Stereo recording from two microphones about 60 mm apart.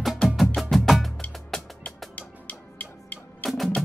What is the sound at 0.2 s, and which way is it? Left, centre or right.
Music, centre.